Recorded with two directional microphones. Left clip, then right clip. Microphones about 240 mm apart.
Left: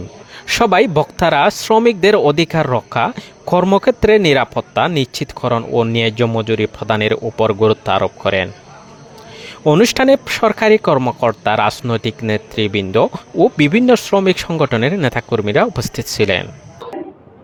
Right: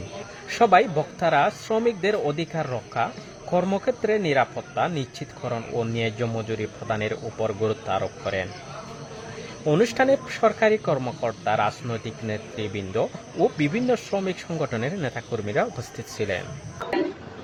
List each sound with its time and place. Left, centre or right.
0.4 s speech: left
9.6 s speech: left